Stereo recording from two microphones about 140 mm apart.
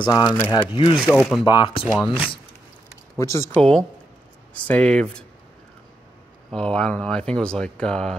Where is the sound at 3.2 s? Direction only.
20° left (ahead or behind).